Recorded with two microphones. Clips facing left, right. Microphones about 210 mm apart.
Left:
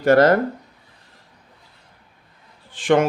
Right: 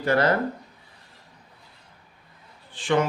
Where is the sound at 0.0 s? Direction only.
45° left (ahead or behind).